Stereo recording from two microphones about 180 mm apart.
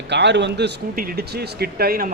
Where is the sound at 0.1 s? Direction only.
75° right (ahead or behind).